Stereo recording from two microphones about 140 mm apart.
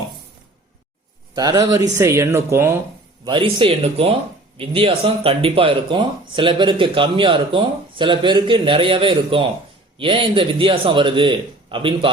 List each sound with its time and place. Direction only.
1.4 s speech: 30° right (ahead or behind)
3.2 s speech: 35° right (ahead or behind)